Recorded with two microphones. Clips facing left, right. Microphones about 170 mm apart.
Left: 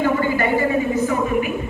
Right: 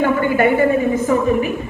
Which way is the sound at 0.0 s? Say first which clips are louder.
Right 4 dB; 55° right (ahead or behind).